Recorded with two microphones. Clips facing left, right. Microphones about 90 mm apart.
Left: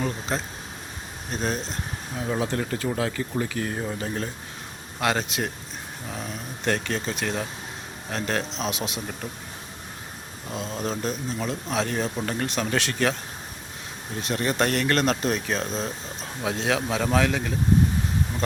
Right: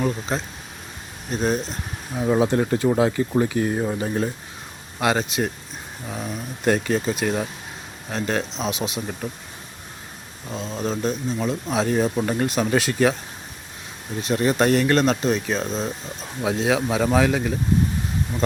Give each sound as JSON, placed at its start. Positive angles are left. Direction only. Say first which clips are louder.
{"t": 0.0, "sound": "speech", "louder": "right 4 dB", "side_deg": 0}
{"t": 2.1, "sound": "speech", "louder": "right 7 dB", "side_deg": -20}
{"t": 4.9, "sound": "speech", "louder": "right 4 dB", "side_deg": -5}
{"t": 10.5, "sound": "speech", "louder": "right 3 dB", "side_deg": 0}
{"t": 14.2, "sound": "speech", "louder": "right 5 dB", "side_deg": -5}